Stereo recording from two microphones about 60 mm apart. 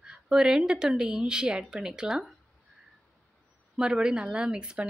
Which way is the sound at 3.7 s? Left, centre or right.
Centre.